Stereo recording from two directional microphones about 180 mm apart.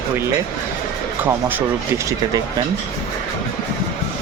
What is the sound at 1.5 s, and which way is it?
Speech, 15° right (ahead or behind).